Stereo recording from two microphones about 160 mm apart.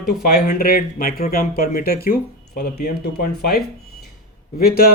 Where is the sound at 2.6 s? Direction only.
85° left.